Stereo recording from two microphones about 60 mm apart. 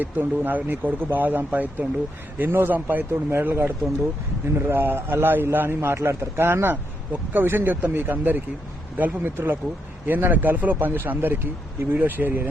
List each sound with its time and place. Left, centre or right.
0.0 s a man's voice: right